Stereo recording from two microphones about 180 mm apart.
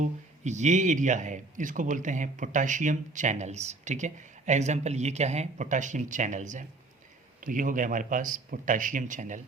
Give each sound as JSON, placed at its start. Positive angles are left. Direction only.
{"t": 0.0, "sound": "a man's voice", "side_deg": -40}